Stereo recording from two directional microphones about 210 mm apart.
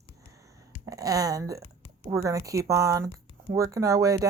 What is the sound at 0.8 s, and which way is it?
Speech, 15° right (ahead or behind).